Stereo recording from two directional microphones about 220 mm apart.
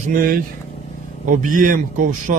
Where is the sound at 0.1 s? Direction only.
40° right (ahead or behind).